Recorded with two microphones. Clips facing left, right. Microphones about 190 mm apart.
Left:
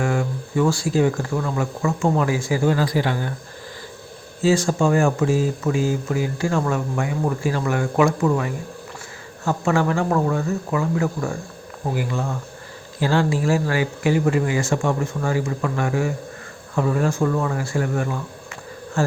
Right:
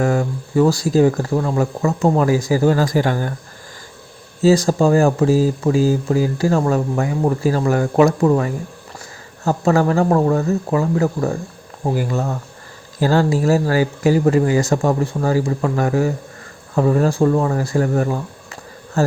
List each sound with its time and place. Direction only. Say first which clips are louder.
0.0 s speech: right 4 dB; 40° right (ahead or behind)
4.4 s speech: right 5 dB; 35° right (ahead or behind)